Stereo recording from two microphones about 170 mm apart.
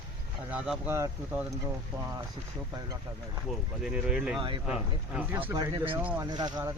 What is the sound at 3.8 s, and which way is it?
Speech, 5° right (ahead or behind).